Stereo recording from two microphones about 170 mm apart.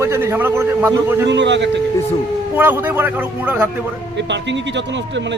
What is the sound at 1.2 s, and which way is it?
Speech, 90° right.